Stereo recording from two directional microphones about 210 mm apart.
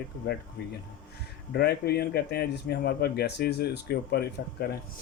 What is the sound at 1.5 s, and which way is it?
Speech, 50° left (ahead or behind).